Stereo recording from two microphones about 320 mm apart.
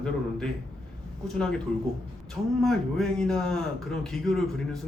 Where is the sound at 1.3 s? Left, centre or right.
Centre.